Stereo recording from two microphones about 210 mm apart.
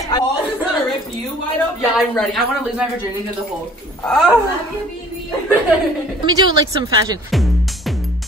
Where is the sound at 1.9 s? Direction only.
Centre (ahead or behind).